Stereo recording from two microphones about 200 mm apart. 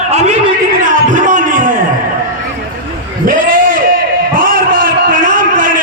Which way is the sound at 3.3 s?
45° right (ahead or behind).